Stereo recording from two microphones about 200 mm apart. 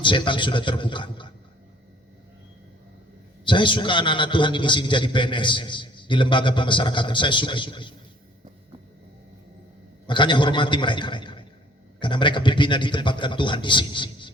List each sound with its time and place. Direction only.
0.0 s a man's voice: 25° left (ahead or behind)
3.4 s a man's voice: 25° left (ahead or behind)
10.1 s a man's voice: 25° left (ahead or behind)